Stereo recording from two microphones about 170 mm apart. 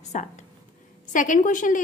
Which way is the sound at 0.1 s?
45° left (ahead or behind).